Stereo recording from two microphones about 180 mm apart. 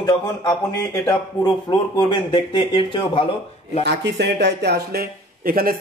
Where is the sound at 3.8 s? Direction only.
70° right (ahead or behind); by 5.8 s 55° right (ahead or behind).